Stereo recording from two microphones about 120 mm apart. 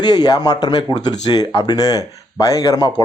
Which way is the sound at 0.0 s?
35° left (ahead or behind).